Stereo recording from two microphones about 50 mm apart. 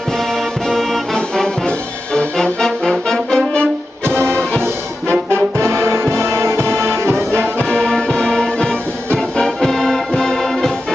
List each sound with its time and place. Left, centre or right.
0.7 s music: centre
2.1 s brass instrument: centre
5.3 s music: right
7.6 s music: centre